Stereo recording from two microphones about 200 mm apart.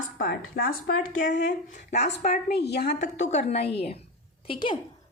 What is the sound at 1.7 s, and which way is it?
Speech, 35° left (ahead or behind).